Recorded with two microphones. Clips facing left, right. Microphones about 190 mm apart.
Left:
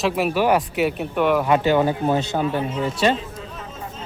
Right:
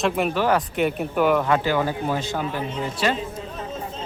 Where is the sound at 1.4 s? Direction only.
20° left (ahead or behind).